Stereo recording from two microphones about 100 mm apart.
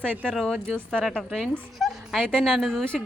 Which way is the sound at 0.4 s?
10° left (ahead or behind).